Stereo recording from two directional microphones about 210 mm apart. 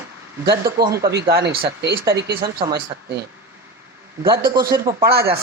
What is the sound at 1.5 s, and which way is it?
Speech, 55° right (ahead or behind).